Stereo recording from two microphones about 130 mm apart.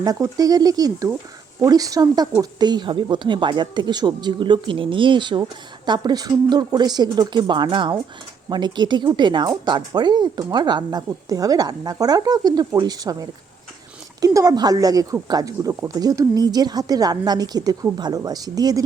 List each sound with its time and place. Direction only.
0.0 s a woman's voice: 30° right (ahead or behind)